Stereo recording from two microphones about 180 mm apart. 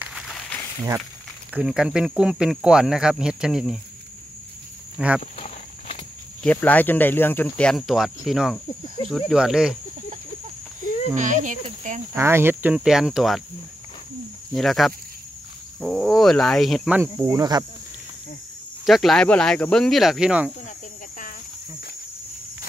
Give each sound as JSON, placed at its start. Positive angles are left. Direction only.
{"t": 0.0, "sound": "a sound", "side_deg": 0}
{"t": 1.5, "sound": "speech", "side_deg": -5}
{"t": 4.9, "sound": "speech", "side_deg": -5}
{"t": 5.2, "sound": "walk", "side_deg": 40}
{"t": 6.4, "sound": "speech", "side_deg": 10}
{"t": 11.1, "sound": "speech", "side_deg": -45}
{"t": 12.2, "sound": "speech", "side_deg": -15}
{"t": 14.5, "sound": "speech", "side_deg": 0}
{"t": 17.0, "sound": "speech", "side_deg": -15}
{"t": 18.9, "sound": "speech", "side_deg": 0}